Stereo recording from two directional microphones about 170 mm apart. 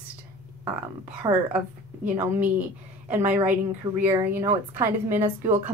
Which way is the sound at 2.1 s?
10° right (ahead or behind).